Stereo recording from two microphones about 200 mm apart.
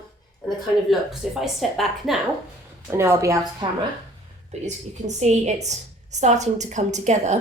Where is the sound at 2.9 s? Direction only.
15° right (ahead or behind).